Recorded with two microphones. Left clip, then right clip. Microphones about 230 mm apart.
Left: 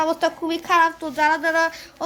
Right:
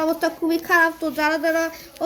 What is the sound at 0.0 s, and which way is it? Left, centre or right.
A woman's voice, left.